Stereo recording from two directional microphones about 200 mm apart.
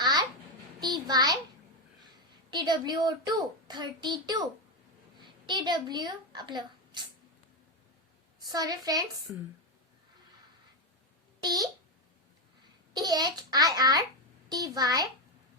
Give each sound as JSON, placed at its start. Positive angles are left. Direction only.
{"t": 0.0, "sound": "babbling", "side_deg": -20}
{"t": 0.8, "sound": "a sound", "side_deg": -20}
{"t": 2.5, "sound": "a woman's voice", "side_deg": -20}
{"t": 8.4, "sound": "a woman's voice", "side_deg": -20}
{"t": 11.4, "sound": "a woman's voice", "side_deg": -20}
{"t": 12.9, "sound": "a woman's voice", "side_deg": -20}